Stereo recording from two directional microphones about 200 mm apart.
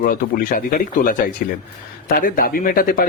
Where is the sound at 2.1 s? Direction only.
45° left (ahead or behind).